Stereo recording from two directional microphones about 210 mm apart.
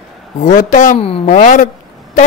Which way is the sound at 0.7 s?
35° left (ahead or behind).